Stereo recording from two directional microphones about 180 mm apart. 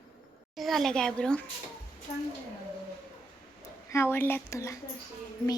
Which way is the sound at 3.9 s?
15° left (ahead or behind).